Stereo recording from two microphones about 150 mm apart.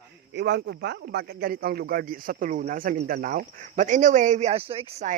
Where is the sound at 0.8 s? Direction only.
90° right; by 5.0 s 40° right (ahead or behind).